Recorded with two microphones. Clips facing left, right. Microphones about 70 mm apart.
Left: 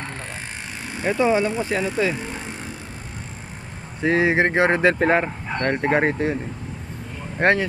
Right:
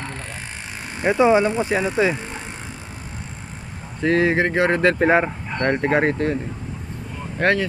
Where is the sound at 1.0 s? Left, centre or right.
Centre.